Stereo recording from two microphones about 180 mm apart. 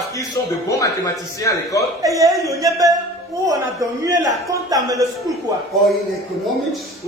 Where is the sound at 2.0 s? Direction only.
20° right (ahead or behind).